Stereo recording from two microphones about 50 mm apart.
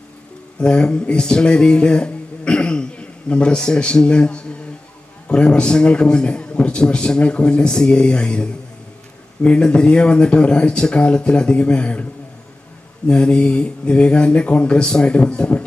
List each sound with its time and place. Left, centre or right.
0.6 s a sound: centre
5.3 s a man's voice: left
13.1 s a man's voice: centre